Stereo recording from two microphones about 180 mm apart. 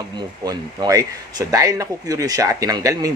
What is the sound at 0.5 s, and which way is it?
Speech, 20° right (ahead or behind).